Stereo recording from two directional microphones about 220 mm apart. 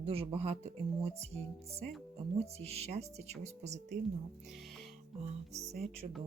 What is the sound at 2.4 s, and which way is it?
Speech, 30° right (ahead or behind).